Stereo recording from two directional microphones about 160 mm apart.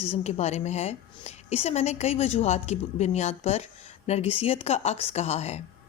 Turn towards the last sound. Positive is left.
turn(degrees=40)  # may be behind; listen again after turning